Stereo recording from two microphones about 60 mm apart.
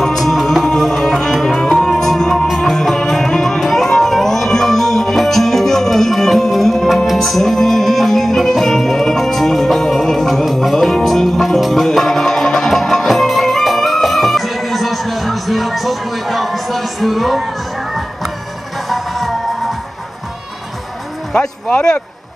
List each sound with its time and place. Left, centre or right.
0.0 s music: centre
18.9 s music: centre
21.3 s music: centre